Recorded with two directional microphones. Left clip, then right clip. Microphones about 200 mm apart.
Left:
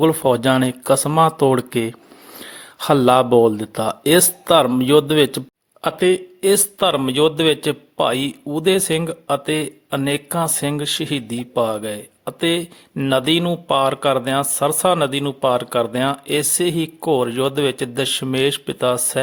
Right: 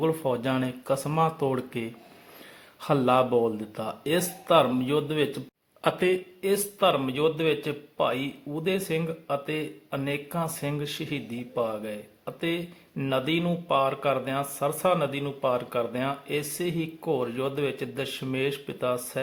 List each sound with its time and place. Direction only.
0.0 s speech: 45° left (ahead or behind)
5.8 s speech: 30° left (ahead or behind)